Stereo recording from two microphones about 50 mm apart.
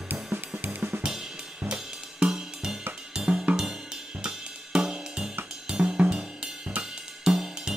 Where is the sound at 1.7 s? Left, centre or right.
Centre.